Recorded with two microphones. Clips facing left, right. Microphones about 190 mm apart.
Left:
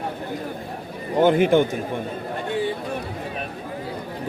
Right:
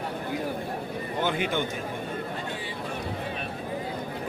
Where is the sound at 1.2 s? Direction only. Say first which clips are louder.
Left 12 dB; 50° left (ahead or behind).